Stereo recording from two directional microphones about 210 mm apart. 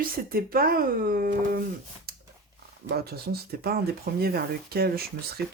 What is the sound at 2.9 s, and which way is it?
Speech, 50° right (ahead or behind).